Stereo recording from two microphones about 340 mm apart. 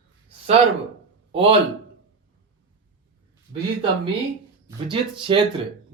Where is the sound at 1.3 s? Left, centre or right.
Centre.